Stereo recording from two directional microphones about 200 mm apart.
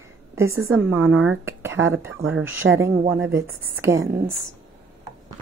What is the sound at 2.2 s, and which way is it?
Speech, 75° right (ahead or behind).